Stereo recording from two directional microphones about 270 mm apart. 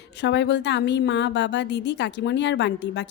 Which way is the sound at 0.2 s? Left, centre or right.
Left.